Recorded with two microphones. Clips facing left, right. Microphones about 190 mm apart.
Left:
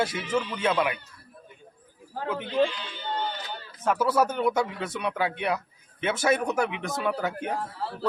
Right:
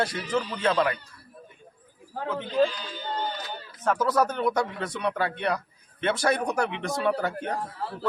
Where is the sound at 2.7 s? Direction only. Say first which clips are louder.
Even; 40° right (ahead or behind).